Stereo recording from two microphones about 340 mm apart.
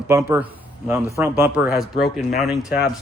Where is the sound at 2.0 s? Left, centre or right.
Left.